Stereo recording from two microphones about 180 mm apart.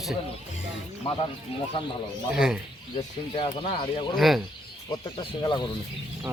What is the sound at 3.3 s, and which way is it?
Speech, 30° left (ahead or behind).